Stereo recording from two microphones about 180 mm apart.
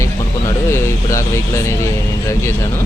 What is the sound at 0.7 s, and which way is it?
Speech, 15° left (ahead or behind).